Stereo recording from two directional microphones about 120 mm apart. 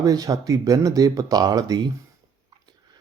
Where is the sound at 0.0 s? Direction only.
30° right (ahead or behind).